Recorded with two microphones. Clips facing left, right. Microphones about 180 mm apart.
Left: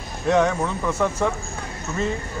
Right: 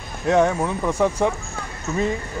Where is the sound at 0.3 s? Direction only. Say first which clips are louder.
Right 1 dB; 10° right (ahead or behind).